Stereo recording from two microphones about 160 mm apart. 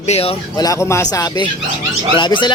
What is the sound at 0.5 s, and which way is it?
A man's voice, 20° left (ahead or behind).